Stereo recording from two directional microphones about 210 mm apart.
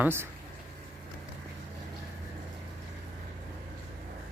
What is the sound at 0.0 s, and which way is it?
Speech, 10° right (ahead or behind).